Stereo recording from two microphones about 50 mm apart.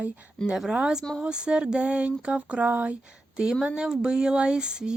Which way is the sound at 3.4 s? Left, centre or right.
Centre.